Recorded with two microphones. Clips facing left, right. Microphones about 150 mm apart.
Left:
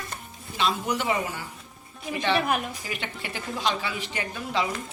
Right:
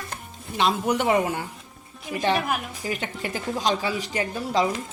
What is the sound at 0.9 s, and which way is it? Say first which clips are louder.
Speech: right 5 dB; 55° right (ahead or behind).